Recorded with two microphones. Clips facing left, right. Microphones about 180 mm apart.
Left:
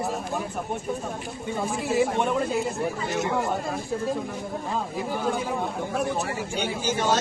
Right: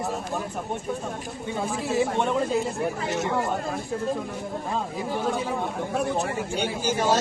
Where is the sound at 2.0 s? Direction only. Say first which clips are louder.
Even; 10° left (ahead or behind).